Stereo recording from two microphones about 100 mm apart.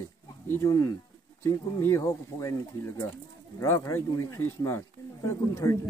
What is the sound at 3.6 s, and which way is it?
Speech, 25° left (ahead or behind).